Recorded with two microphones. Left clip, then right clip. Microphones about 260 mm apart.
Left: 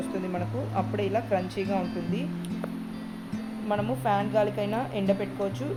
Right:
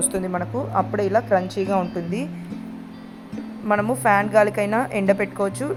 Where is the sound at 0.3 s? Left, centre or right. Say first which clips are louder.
Right 9 dB; centre.